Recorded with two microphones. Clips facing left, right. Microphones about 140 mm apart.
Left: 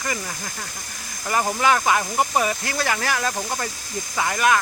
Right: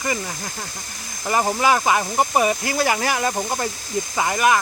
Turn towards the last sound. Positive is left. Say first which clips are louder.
# right 2 dB
turn(degrees=-10)  # may be behind; listen again after turning